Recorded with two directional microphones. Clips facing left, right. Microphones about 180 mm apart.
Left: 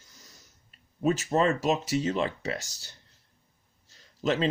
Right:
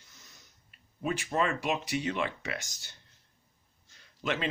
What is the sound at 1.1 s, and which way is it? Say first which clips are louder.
Speech: left 6 dB; 35° left (ahead or behind).